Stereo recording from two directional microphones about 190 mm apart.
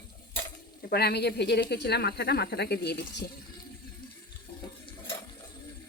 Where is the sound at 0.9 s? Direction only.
55° left (ahead or behind).